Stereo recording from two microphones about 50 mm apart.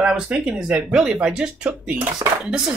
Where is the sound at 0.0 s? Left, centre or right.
Centre.